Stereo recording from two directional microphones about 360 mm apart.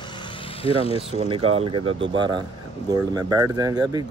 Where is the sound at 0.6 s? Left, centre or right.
Centre.